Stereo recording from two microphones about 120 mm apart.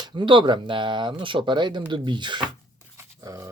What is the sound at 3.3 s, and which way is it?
Speech, 30° right (ahead or behind).